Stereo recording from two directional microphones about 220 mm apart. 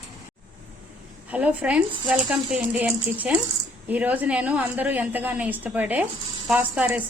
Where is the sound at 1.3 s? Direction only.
5° right (ahead or behind).